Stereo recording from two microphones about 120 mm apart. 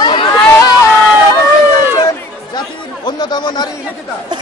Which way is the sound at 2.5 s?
40° left (ahead or behind).